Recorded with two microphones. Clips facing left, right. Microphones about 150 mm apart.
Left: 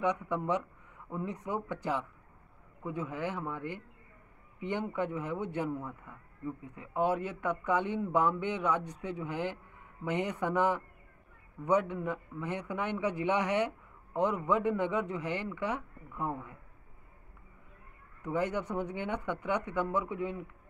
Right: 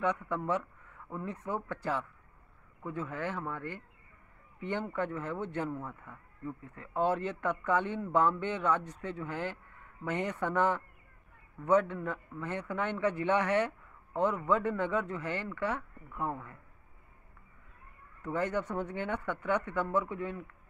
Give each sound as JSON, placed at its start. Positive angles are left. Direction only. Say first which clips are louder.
{"t": 0.0, "sound": "speech", "louder": "left 1 dB", "side_deg": 15}
{"t": 18.2, "sound": "speech", "louder": "even", "side_deg": 15}